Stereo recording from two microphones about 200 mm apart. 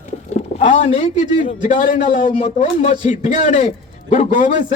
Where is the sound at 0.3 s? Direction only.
35° left (ahead or behind).